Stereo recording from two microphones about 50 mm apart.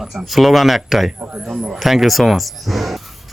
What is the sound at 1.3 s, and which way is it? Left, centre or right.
Speech, right.